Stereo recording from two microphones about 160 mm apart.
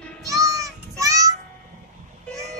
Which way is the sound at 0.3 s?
20° right (ahead or behind).